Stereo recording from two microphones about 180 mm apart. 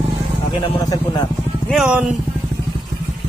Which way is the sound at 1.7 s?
5° right (ahead or behind).